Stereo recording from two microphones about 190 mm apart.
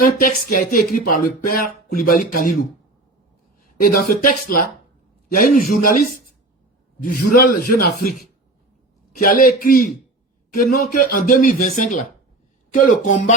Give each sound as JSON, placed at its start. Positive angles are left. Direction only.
{"t": 0.0, "sound": "speech", "side_deg": 50}
{"t": 3.8, "sound": "speech", "side_deg": 45}